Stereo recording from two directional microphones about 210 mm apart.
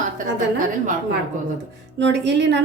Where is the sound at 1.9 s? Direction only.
55° right (ahead or behind).